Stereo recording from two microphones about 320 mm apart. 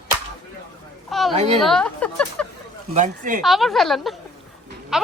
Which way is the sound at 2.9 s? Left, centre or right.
Right.